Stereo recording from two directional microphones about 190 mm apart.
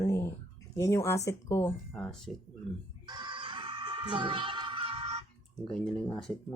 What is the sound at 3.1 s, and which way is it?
Music, 25° right (ahead or behind).